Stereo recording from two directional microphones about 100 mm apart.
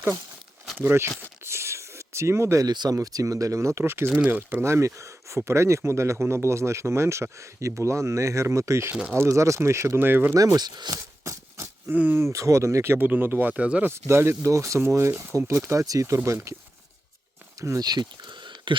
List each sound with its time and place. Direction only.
0.8 s speech: 20° right (ahead or behind)
1.5 s a sound: 25° right (ahead or behind)
2.6 s speech: 45° right (ahead or behind); by 4.1 s 25° right (ahead or behind)
4.1 s speech: 15° right (ahead or behind)
10.3 s speech: 35° right (ahead or behind)
11.2 s a sound: 30° right (ahead or behind)
11.9 s speech: 15° right (ahead or behind)
12.2 s speech: 30° right (ahead or behind); by 13.9 s 15° right (ahead or behind)
14.1 s speech: 25° right (ahead or behind)
17.6 s speech: 35° right (ahead or behind); by 18.8 s 50° right (ahead or behind)